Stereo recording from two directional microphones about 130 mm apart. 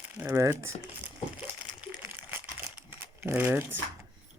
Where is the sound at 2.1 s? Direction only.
15° right (ahead or behind).